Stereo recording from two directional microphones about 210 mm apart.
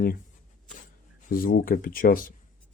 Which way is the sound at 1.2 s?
40° left (ahead or behind).